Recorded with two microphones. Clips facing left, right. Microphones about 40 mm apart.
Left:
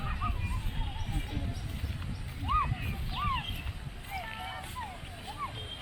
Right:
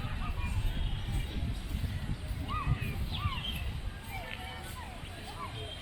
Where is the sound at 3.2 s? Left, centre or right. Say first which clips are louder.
Left 8 dB; left.